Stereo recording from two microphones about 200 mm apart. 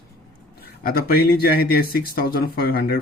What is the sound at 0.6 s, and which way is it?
Speech, 50° left (ahead or behind).